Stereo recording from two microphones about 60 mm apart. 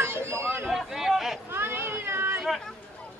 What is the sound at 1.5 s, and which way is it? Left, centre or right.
Cat, right.